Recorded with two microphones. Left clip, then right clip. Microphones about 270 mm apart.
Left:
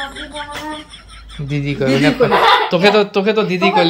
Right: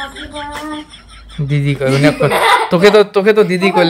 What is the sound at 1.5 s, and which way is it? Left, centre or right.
Speech, right.